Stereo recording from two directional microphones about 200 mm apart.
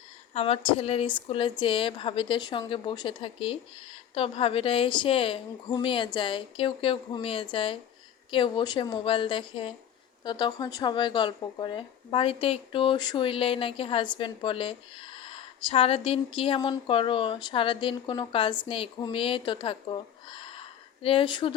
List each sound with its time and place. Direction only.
0.3 s speech: 30° left (ahead or behind)